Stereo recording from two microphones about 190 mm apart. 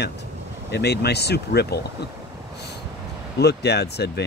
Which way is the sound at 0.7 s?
60° left (ahead or behind).